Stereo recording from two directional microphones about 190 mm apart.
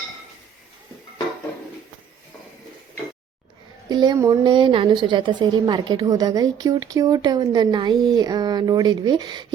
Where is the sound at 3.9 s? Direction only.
20° right (ahead or behind).